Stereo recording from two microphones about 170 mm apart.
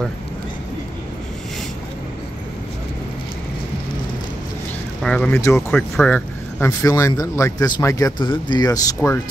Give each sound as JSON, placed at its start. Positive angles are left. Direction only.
{"t": 5.0, "sound": "speech", "side_deg": 5}